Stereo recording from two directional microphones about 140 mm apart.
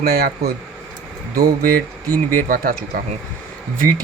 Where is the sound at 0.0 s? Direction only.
90° right.